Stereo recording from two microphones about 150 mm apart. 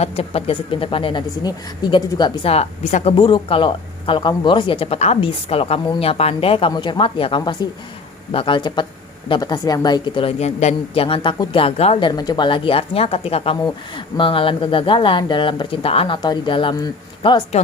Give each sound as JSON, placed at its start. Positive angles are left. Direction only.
{"t": 0.0, "sound": "a woman's voice", "side_deg": 40}
{"t": 13.6, "sound": "a woman's voice", "side_deg": 30}